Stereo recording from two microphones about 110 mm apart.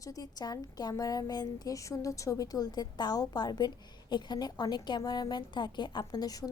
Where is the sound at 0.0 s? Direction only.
35° left (ahead or behind).